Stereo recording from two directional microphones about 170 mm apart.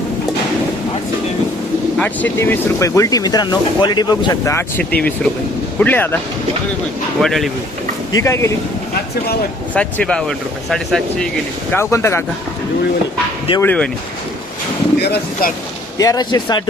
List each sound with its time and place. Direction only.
2.0 s speech: 10° left (ahead or behind)
4.8 s speech: 10° left (ahead or behind)
7.2 s speech: centre (ahead or behind)
8.2 s speech: 15° left (ahead or behind)
9.7 s speech: 5° left (ahead or behind)
11.7 s speech: 15° left (ahead or behind)
13.6 s speech: 10° left (ahead or behind)
14.9 s speech: 70° left (ahead or behind)
16.0 s speech: 20° left (ahead or behind)